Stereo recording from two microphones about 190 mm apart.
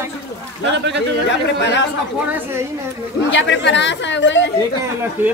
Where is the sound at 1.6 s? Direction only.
70° left (ahead or behind).